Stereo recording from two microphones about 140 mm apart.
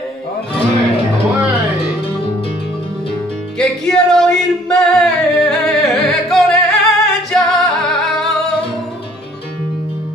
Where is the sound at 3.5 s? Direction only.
5° left (ahead or behind).